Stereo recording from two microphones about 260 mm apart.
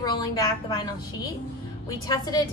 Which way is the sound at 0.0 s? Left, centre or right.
Centre.